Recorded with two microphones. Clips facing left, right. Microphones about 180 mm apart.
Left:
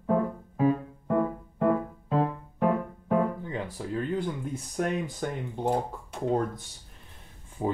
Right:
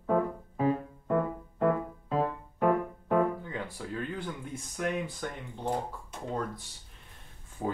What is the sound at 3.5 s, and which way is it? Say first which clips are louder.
Music: left 4 dB; 25° left (ahead or behind).